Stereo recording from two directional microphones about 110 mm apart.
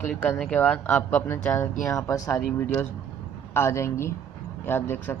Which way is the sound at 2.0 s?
35° left (ahead or behind).